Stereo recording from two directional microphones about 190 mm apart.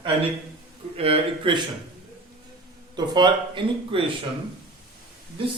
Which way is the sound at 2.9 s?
25° right (ahead or behind).